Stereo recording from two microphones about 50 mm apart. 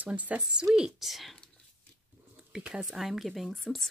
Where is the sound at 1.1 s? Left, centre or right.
Centre.